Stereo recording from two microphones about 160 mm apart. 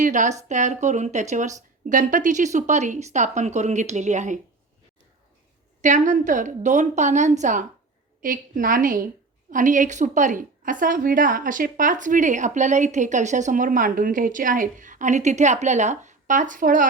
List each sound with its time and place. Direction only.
0.0 s a woman's voice: 50° right (ahead or behind)
5.8 s a woman's voice: 50° right (ahead or behind)